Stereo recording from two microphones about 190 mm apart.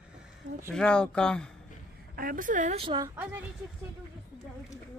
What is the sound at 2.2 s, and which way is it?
Speech, 45° right (ahead or behind).